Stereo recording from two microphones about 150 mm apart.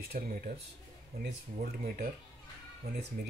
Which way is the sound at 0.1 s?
85° right.